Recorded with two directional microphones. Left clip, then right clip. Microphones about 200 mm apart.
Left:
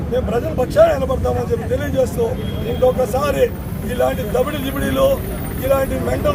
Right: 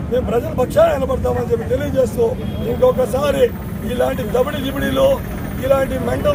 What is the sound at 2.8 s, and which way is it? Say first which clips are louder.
Speech: right 1 dB; 5° left (ahead or behind).